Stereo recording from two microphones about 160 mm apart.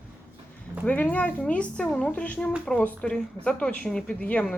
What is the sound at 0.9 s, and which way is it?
Speech, 10° left (ahead or behind).